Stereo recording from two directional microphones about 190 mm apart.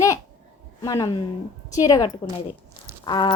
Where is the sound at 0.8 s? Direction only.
20° left (ahead or behind).